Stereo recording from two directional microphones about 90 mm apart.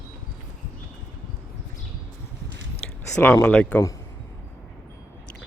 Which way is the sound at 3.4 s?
15° left (ahead or behind).